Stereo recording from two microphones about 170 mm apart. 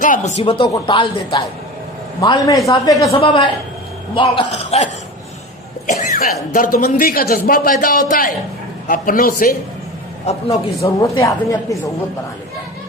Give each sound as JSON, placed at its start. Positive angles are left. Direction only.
{"t": 0.0, "sound": "a woman's voice", "side_deg": 45}
{"t": 3.2, "sound": "speech", "side_deg": 30}
{"t": 6.0, "sound": "a man's voice", "side_deg": 50}
{"t": 10.8, "sound": "a woman's voice", "side_deg": 20}